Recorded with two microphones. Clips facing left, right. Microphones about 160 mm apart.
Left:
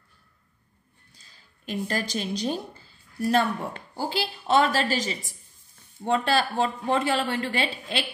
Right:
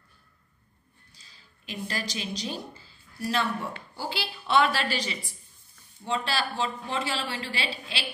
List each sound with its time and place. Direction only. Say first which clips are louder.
1.2 s a woman's voice: left 7 dB; 50° left (ahead or behind)